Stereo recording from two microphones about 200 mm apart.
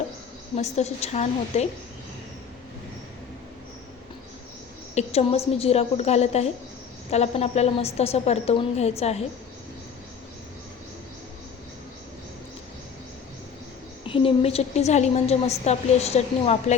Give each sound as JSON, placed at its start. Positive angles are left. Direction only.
{"t": 0.5, "sound": "a woman's voice", "side_deg": 35}
{"t": 4.9, "sound": "a woman's voice", "side_deg": 30}
{"t": 14.0, "sound": "a woman's voice", "side_deg": 25}